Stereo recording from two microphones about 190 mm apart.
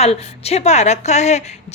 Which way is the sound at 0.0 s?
35° left (ahead or behind).